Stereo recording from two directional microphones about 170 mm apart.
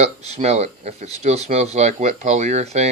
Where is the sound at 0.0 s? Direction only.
40° right (ahead or behind).